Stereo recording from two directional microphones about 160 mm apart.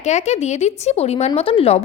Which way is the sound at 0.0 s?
45° left (ahead or behind).